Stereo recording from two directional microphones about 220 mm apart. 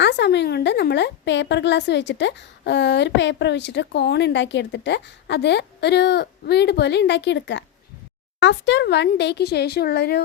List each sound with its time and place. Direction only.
0.0 s a woman's voice: 50° left (ahead or behind)